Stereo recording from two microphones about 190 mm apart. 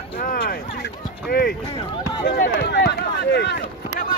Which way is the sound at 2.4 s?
60° left (ahead or behind).